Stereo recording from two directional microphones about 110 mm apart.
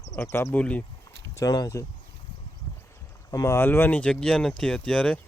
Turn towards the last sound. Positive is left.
turn(degrees=10)  # may be behind; listen again after turning